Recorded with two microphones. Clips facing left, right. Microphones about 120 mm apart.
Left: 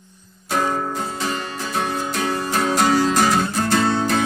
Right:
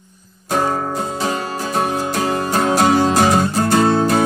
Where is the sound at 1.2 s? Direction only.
40° right (ahead or behind).